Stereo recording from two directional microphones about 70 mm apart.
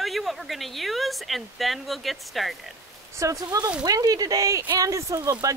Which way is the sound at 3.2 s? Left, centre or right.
Right.